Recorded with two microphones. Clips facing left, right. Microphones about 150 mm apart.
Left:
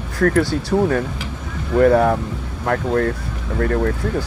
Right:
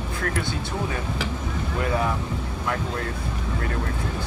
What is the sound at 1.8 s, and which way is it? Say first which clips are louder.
Speech: left 12 dB; 60° left (ahead or behind).